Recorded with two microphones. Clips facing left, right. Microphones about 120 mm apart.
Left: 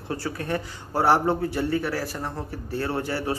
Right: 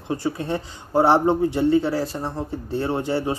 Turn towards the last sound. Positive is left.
turn(degrees=-20)  # may be behind; listen again after turning